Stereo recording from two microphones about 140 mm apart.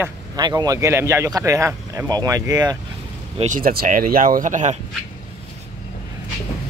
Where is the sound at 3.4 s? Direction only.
80° right; by 4.8 s 60° right (ahead or behind).